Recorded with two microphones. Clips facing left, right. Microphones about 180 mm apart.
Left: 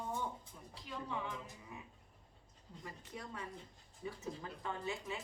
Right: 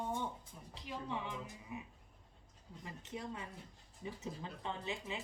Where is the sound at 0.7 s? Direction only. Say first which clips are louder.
Right 1 dB; 20° right (ahead or behind).